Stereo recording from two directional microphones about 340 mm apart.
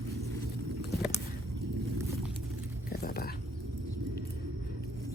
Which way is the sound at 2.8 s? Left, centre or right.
Left.